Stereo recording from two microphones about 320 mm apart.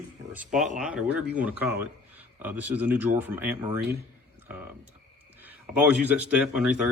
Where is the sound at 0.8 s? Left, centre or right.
Centre.